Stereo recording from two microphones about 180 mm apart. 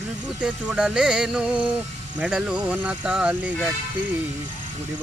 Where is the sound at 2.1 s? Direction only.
5° right (ahead or behind).